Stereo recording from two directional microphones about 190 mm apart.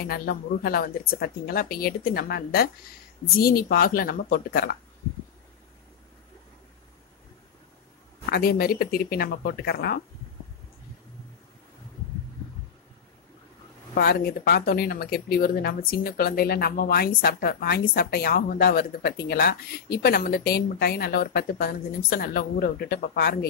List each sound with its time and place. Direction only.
0.0 s a woman's voice: 50° left (ahead or behind)
8.3 s a woman's voice: 55° left (ahead or behind)
13.9 s a woman's voice: 55° left (ahead or behind)